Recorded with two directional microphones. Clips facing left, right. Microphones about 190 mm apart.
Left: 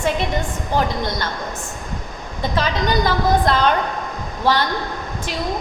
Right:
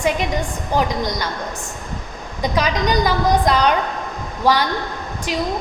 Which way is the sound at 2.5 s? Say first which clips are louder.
Right 1 dB; 15° right (ahead or behind).